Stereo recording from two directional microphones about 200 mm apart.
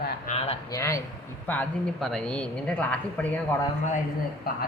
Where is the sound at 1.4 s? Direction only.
10° left (ahead or behind).